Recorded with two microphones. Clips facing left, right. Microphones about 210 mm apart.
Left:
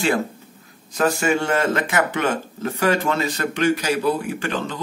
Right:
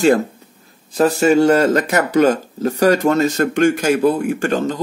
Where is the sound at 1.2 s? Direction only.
40° right (ahead or behind).